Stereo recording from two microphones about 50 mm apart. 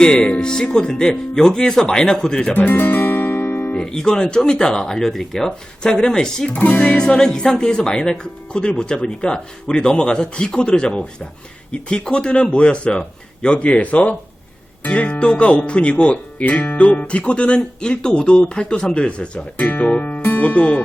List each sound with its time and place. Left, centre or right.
0.0 s speech: centre
2.4 s speech: left
2.6 s music: left
3.8 s speech: centre
6.5 s speech: left
19.6 s speech: left